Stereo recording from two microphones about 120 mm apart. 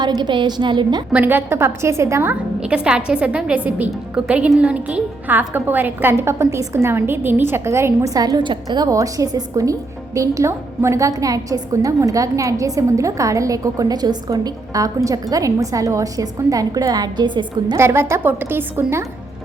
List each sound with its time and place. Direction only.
0.0 s a woman's voice: 35° right (ahead or behind)
1.1 s a woman's voice: 15° right (ahead or behind)
2.6 s a woman's voice: 10° right (ahead or behind); by 17.7 s 40° right (ahead or behind)
17.7 s a woman's voice: 20° right (ahead or behind)